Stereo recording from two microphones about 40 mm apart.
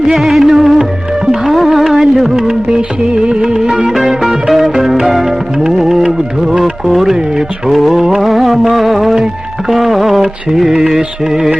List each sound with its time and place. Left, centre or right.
0.1 s music: centre